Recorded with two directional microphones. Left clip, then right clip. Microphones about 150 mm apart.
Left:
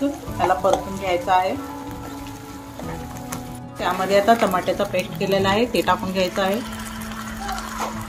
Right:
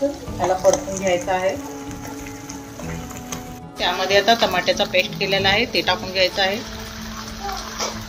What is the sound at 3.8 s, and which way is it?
Speech, 50° left (ahead or behind).